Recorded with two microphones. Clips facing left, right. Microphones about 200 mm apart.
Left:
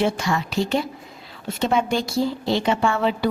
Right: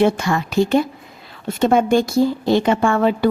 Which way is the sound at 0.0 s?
55° right (ahead or behind).